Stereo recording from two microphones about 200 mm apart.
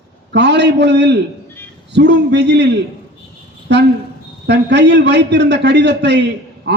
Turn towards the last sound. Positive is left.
turn(degrees=-60)  # may be behind; listen again after turning